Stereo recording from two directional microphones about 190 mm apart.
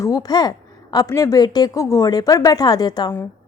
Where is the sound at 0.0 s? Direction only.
20° left (ahead or behind).